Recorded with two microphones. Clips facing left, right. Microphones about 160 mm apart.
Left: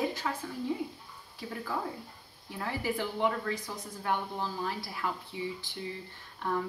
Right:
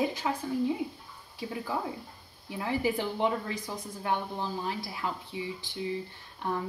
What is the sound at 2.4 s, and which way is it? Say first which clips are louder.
A woman's voice: right 4 dB; 15° right (ahead or behind).